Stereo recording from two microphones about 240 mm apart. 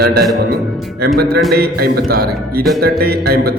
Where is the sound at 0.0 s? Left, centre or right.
Right.